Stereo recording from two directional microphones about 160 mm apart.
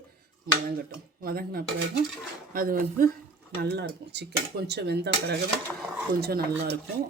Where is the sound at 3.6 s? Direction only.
90° right.